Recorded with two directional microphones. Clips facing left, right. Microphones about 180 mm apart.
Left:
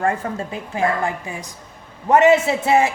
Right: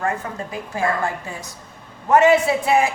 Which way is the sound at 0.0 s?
25° left (ahead or behind).